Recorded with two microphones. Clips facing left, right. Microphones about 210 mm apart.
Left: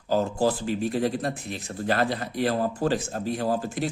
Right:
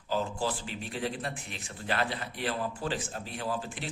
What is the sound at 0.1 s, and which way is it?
Speech, 40° left (ahead or behind).